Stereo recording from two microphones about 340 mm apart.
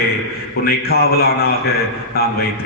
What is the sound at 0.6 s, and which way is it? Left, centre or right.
Speech, left.